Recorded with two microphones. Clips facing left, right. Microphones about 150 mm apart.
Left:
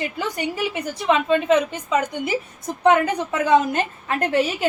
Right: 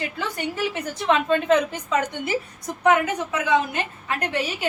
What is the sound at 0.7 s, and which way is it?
Speech, 5° left (ahead or behind).